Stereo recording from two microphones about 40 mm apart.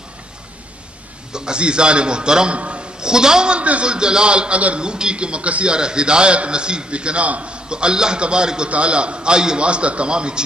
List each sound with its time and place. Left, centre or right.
1.3 s a man's voice: right
4.7 s a man's voice: right